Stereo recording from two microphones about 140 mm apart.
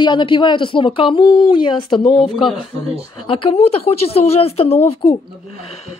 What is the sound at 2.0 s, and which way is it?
Speech, centre (ahead or behind).